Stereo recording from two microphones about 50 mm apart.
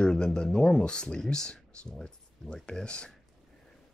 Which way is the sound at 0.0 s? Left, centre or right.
Centre.